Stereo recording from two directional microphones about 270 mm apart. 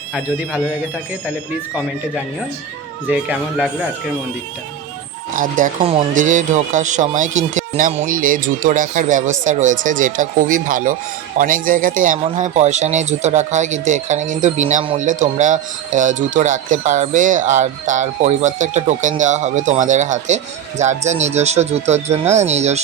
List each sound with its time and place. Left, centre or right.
5.3 s speech: right